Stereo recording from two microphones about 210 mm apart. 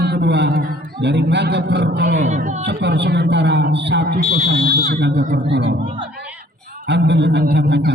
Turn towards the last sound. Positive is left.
turn(degrees=-55)  # may be behind; listen again after turning